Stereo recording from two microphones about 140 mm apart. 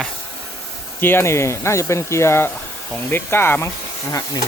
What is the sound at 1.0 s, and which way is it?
Speech, 15° left (ahead or behind).